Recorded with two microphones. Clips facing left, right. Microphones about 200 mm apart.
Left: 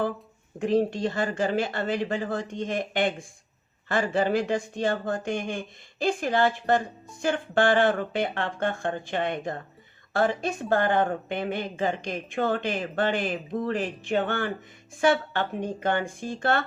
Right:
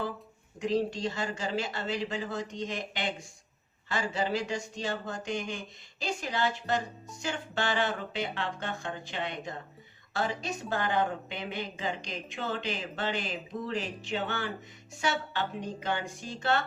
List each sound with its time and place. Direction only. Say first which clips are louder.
0.6 s speech: left 5 dB; 55° left (ahead or behind)